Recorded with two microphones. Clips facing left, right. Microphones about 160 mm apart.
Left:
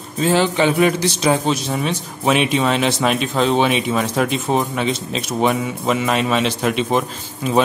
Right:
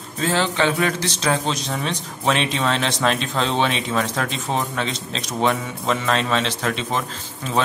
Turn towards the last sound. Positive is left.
turn(degrees=15)  # may be behind; listen again after turning